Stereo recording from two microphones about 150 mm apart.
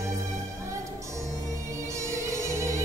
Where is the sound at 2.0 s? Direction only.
20° right (ahead or behind).